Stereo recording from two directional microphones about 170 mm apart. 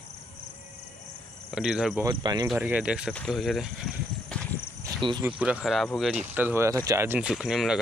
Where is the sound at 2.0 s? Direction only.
25° right (ahead or behind).